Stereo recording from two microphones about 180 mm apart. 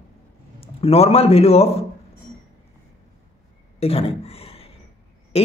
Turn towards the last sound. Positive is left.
turn(degrees=35)  # may be behind; listen again after turning